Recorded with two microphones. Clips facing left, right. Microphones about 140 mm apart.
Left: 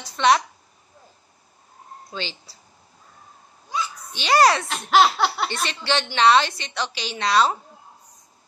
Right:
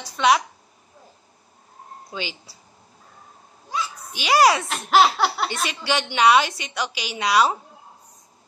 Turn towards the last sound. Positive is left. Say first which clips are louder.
# even
turn(degrees=-10)  # may be behind; listen again after turning